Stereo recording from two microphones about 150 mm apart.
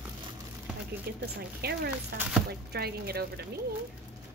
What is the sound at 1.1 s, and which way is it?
A woman's voice, 90° right.